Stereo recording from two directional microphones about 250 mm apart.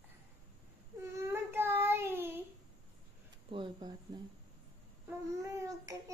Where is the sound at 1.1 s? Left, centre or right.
Centre.